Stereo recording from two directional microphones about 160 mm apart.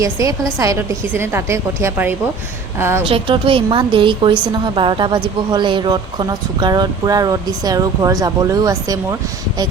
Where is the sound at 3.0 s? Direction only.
30° right (ahead or behind).